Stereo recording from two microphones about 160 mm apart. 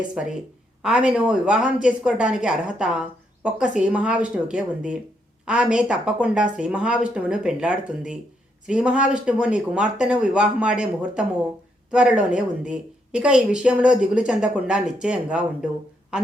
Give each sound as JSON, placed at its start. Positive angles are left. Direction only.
{"t": 0.1, "sound": "speech", "side_deg": -5}